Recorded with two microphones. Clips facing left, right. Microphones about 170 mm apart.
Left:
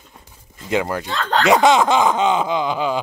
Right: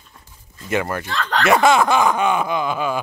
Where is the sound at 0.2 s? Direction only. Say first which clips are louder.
Right 1 dB; 15° left (ahead or behind).